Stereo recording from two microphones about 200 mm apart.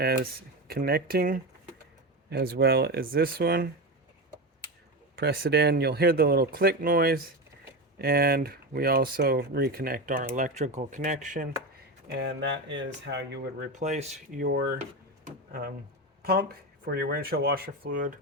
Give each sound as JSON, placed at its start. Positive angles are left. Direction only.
{"t": 0.0, "sound": "speech", "side_deg": -50}
{"t": 5.1, "sound": "speech", "side_deg": -50}
{"t": 12.1, "sound": "speech", "side_deg": -60}
{"t": 13.7, "sound": "speech", "side_deg": -35}
{"t": 16.2, "sound": "speech", "side_deg": -50}